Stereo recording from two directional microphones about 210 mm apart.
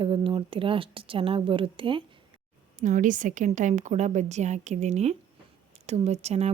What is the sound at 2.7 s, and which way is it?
Speech, 35° right (ahead or behind).